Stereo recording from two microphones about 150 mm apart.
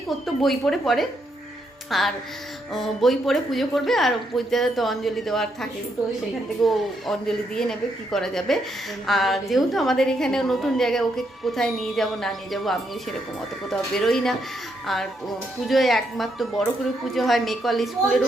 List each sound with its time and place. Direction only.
0.4 s a woman's voice: centre (ahead or behind)
15.6 s a woman's voice: centre (ahead or behind)